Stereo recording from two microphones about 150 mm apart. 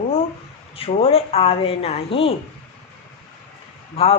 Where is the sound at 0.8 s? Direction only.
40° left (ahead or behind).